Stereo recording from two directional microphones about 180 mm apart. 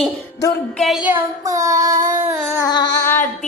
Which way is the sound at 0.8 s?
Centre (ahead or behind).